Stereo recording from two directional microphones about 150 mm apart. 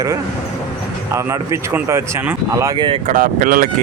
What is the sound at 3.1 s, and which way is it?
Speech, 65° right (ahead or behind).